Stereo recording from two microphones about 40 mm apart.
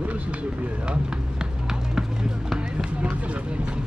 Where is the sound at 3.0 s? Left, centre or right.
Right.